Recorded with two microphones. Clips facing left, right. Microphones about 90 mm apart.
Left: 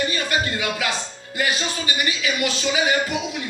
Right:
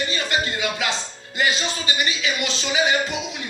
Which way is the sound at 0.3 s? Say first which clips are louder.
Left 1 dB; 25° right (ahead or behind).